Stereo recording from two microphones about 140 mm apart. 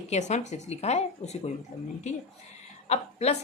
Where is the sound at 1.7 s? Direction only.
80° left.